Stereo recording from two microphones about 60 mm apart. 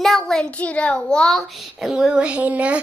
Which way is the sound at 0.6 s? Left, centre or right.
Centre.